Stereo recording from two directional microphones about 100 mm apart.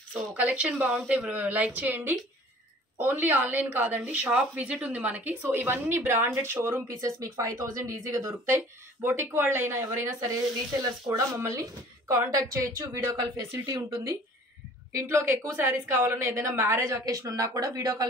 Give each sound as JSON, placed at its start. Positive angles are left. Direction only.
{"t": 0.1, "sound": "a woman's voice", "side_deg": -15}
{"t": 14.9, "sound": "speech", "side_deg": -30}